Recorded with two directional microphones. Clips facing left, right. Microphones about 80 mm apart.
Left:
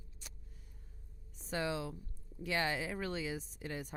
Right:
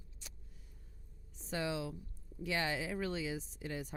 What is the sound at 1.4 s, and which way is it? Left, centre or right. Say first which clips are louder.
Speech: left 1 dB; left.